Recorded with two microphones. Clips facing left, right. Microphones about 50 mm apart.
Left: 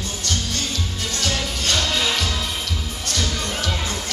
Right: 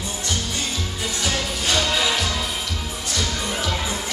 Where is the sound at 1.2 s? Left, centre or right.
Centre.